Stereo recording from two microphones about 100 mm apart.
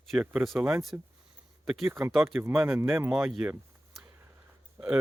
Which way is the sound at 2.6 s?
25° right (ahead or behind).